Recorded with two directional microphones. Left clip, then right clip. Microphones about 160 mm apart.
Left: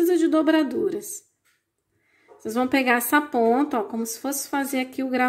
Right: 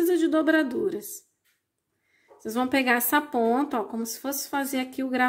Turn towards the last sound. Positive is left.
turn(degrees=-5)  # may be behind; listen again after turning